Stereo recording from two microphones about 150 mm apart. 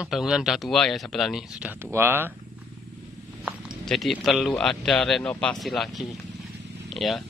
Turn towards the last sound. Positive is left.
turn(degrees=0)  # may be behind; listen again after turning